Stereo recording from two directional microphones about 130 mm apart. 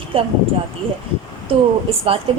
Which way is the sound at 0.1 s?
45° right (ahead or behind).